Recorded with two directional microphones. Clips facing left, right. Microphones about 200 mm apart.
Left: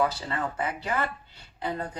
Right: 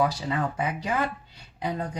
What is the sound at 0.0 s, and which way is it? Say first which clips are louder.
A woman's voice: right 2 dB; 10° right (ahead or behind).